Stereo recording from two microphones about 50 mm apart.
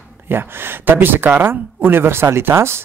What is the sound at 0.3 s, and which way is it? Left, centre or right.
A man's voice, right.